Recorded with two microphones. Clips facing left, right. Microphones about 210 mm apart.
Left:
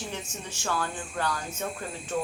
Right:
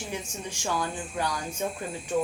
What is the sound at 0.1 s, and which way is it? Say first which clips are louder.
A woman's voice: right 2 dB; 15° right (ahead or behind).